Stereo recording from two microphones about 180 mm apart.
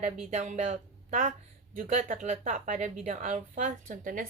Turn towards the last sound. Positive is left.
turn(degrees=-50)  # may be behind; listen again after turning